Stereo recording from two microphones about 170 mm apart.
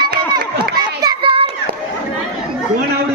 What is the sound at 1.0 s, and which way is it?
Children playing, 30° right (ahead or behind).